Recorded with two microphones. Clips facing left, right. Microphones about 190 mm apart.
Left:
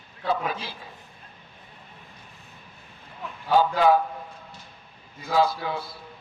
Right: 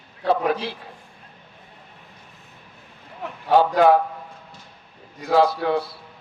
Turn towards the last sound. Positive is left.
turn(degrees=-65)  # may be behind; listen again after turning